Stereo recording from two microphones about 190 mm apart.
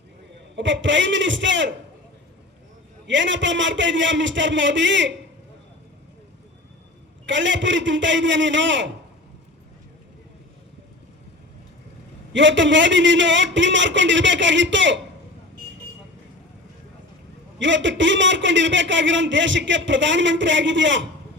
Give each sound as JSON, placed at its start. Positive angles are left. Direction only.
{"t": 0.5, "sound": "a man's voice", "side_deg": -75}
{"t": 3.1, "sound": "a man's voice", "side_deg": -75}
{"t": 7.3, "sound": "a man's voice", "side_deg": -75}
{"t": 12.3, "sound": "a man's voice", "side_deg": -75}
{"t": 17.6, "sound": "a man's voice", "side_deg": -75}